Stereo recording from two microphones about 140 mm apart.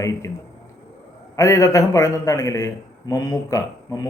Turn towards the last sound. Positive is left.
turn(degrees=25)  # may be behind; listen again after turning